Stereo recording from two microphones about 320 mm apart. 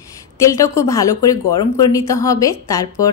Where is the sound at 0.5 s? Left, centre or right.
Centre.